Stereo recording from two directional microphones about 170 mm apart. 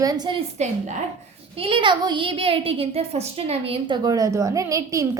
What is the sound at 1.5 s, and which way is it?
A child's voice, 35° right (ahead or behind).